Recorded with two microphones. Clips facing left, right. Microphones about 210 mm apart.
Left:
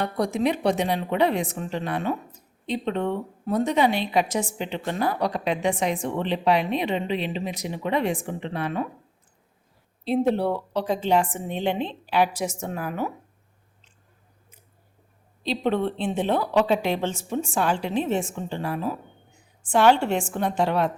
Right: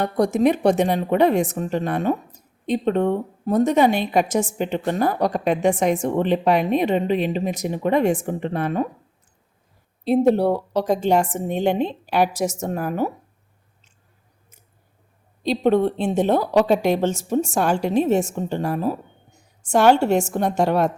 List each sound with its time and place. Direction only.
0.0 s a woman's voice: 45° right (ahead or behind)
10.0 s a woman's voice: 45° right (ahead or behind)
15.4 s a woman's voice: 45° right (ahead or behind)